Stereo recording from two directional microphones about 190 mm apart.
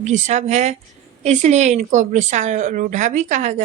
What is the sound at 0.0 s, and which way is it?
Speech, 40° right (ahead or behind).